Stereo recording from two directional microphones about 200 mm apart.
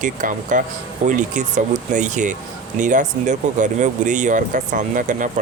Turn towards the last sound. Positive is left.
turn(degrees=-40)  # may be behind; listen again after turning